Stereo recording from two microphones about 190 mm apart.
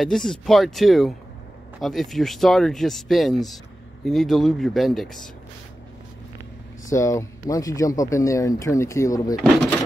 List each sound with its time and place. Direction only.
0.0 s speech: 5° left (ahead or behind)
6.9 s speech: 15° left (ahead or behind)
9.4 s speech: 5° left (ahead or behind)